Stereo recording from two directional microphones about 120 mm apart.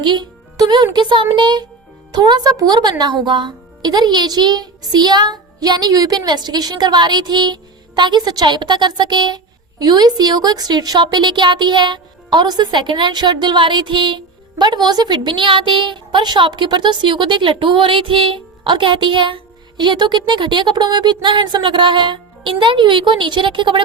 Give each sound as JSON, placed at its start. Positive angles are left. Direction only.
{"t": 0.0, "sound": "speech", "side_deg": -40}